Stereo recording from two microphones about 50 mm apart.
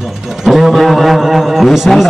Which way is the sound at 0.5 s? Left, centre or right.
Centre.